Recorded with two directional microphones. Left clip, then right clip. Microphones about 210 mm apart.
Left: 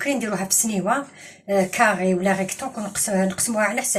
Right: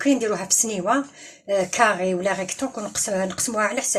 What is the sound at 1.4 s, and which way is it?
Speech, 50° right (ahead or behind).